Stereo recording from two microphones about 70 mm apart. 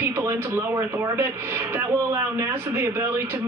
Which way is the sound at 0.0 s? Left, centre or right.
Right.